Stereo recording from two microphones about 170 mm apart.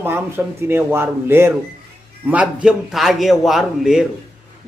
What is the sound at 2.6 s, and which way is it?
Speech, centre (ahead or behind).